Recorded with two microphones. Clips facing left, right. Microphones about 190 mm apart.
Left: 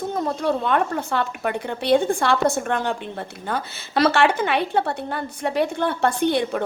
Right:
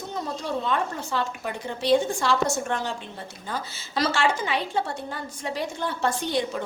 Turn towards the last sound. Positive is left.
turn(degrees=60)  # may be behind; listen again after turning